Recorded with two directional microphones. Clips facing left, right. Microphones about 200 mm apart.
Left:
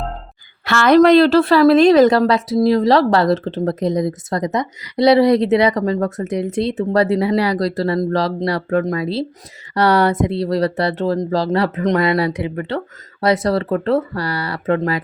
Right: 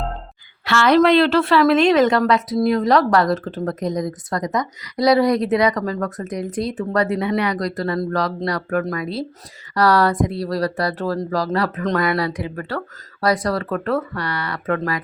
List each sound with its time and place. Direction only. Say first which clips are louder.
0.6 s a woman's voice: left 4 dB; 50° left (ahead or behind); by 15.0 s 25° left (ahead or behind)